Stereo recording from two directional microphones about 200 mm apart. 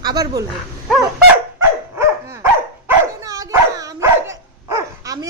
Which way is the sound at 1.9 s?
15° right (ahead or behind).